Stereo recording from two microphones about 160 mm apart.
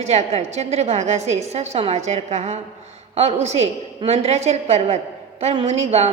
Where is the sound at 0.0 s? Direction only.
40° right (ahead or behind).